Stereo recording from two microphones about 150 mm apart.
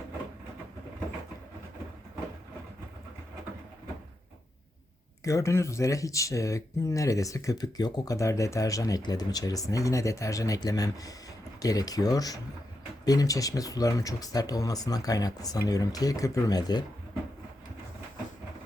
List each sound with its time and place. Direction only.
5.2 s speech: 20° left (ahead or behind)